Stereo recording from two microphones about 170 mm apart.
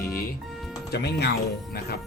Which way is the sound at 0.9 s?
70° left (ahead or behind).